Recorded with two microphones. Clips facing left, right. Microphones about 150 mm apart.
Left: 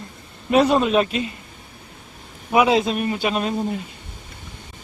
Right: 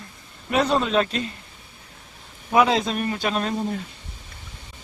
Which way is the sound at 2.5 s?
5° left (ahead or behind).